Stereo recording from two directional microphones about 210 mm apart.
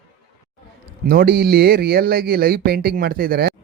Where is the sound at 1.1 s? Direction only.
50° right (ahead or behind).